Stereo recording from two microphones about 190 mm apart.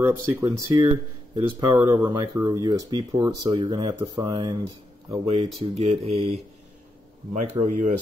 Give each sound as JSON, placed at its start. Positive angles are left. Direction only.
{"t": 0.0, "sound": "speech", "side_deg": -15}
{"t": 5.6, "sound": "speech", "side_deg": -35}